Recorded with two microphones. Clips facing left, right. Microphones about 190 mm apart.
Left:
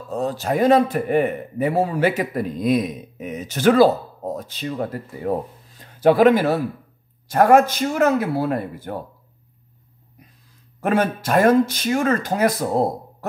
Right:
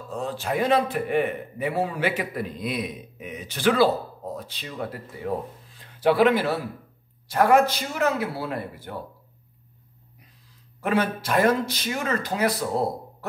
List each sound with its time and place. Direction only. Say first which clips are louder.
0.1 s a man's voice: left 5 dB; 40° left (ahead or behind)
10.8 s a man's voice: left 4 dB; 45° left (ahead or behind)